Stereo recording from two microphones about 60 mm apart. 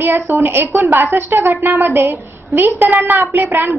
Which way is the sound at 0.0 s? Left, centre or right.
Right.